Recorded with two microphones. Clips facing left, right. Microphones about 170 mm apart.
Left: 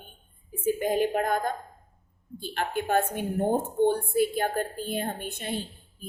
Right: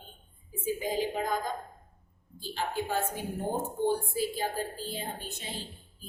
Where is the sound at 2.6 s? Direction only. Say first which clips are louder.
Left 5 dB; 60° left (ahead or behind).